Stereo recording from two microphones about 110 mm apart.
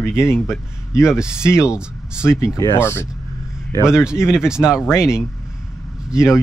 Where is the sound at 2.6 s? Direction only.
20° left (ahead or behind).